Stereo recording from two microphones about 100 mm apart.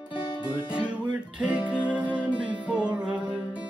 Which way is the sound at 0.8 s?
10° right (ahead or behind).